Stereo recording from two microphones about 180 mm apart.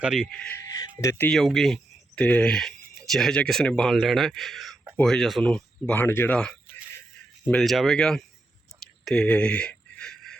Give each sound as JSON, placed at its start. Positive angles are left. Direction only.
{"t": 0.0, "sound": "speech", "side_deg": -5}
{"t": 0.7, "sound": "speech", "side_deg": 20}
{"t": 1.3, "sound": "speech", "side_deg": 0}
{"t": 9.0, "sound": "a sound", "side_deg": 5}